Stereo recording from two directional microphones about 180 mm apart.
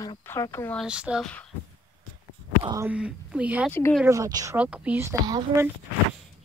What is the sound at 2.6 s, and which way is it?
Speech, 20° right (ahead or behind).